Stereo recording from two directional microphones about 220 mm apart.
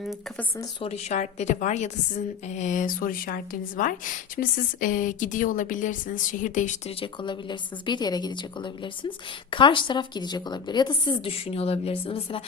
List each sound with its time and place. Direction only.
0.0 s speech: centre (ahead or behind)
0.5 s a woman's voice: 15° left (ahead or behind)
0.9 s a woman's voice: 30° left (ahead or behind)